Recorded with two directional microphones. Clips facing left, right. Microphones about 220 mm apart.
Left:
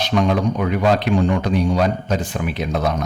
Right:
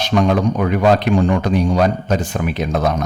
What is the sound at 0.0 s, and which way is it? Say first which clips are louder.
A man's voice: right 2 dB; 45° right (ahead or behind).